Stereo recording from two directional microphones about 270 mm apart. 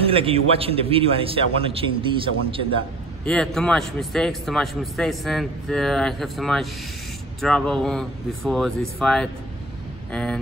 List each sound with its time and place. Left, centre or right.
0.0 s a man's voice: centre
3.3 s a man's voice: centre